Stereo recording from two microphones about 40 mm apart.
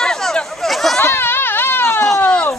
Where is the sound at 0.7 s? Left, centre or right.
Centre.